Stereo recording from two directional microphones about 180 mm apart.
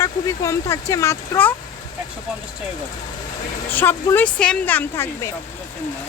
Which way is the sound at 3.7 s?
10° left (ahead or behind).